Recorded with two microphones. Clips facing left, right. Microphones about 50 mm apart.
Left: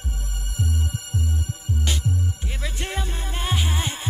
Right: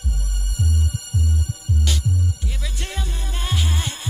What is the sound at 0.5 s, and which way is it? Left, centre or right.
Music, left.